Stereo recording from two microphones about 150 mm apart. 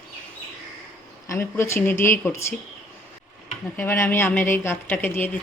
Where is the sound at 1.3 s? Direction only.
20° left (ahead or behind).